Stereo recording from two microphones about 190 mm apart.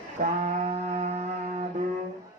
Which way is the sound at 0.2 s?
35° right (ahead or behind).